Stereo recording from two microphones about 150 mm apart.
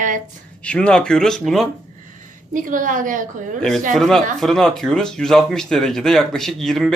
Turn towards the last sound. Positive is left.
turn(degrees=0)  # may be behind; listen again after turning